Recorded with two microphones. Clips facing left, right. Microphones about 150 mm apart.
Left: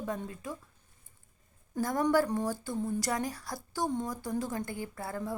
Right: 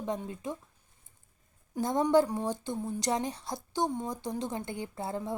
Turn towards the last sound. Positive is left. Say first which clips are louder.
# right 2 dB
turn(degrees=-20)  # may be behind; listen again after turning